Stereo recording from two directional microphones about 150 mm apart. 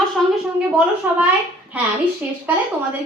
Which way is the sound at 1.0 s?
10° right (ahead or behind).